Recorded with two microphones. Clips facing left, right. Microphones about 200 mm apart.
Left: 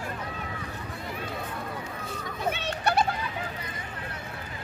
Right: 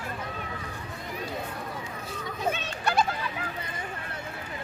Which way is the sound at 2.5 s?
65° left (ahead or behind).